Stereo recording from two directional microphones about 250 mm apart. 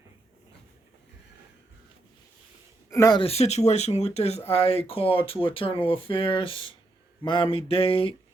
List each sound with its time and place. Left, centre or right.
2.9 s speech: centre